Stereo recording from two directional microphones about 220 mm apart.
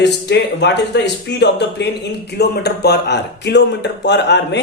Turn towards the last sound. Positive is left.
turn(degrees=50)  # may be behind; listen again after turning